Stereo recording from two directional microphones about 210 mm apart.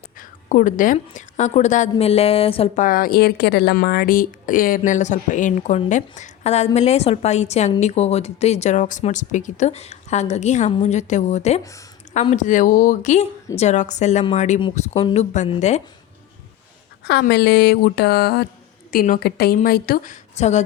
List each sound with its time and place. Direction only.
0.2 s a woman's voice: 40° left (ahead or behind)
2.8 s a woman's voice: 45° left (ahead or behind)
17.0 s a sound: 50° left (ahead or behind)
19.6 s a woman's voice: 45° left (ahead or behind)